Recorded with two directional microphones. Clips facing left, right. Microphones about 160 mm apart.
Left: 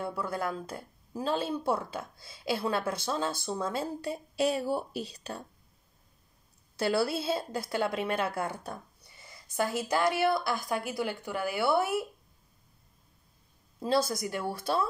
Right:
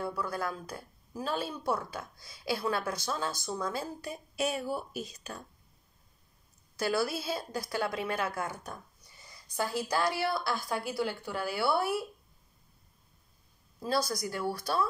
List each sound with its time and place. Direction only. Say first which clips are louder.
0.0 s speech: left 1 dB; 25° left (ahead or behind)
6.8 s speech: left 2 dB; 30° left (ahead or behind)
13.7 s speech: left 3 dB; 25° left (ahead or behind)